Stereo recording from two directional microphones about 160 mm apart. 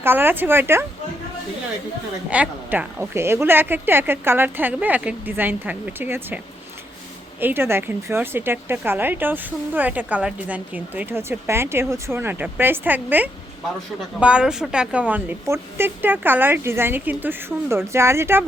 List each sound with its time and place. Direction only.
0.0 s a woman's voice: 15° right (ahead or behind)
2.3 s a woman's voice: 10° right (ahead or behind)